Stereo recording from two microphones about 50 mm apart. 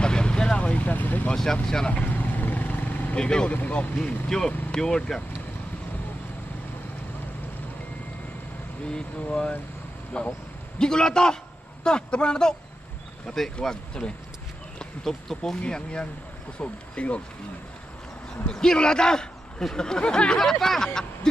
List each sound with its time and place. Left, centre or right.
0.0 s vehicle: centre; by 1.3 s left
1.3 s speech: centre
1.9 s vehicle: left
3.2 s a man's voice: centre
10.1 s a man's voice: centre
13.6 s a man's voice: centre
15.6 s speech: left
18.5 s a man's voice: centre